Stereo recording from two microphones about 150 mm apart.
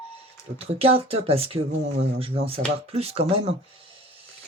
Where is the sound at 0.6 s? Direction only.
40° right (ahead or behind).